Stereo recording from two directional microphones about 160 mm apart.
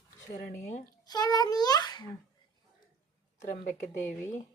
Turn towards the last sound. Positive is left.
turn(degrees=50)  # may be behind; listen again after turning